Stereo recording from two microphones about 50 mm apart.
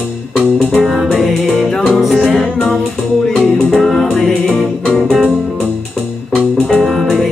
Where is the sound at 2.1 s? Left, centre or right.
Centre.